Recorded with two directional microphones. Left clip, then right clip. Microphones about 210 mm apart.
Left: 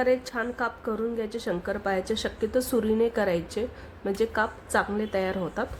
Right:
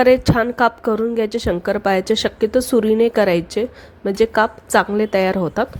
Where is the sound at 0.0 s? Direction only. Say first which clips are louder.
Right 12 dB; 35° right (ahead or behind).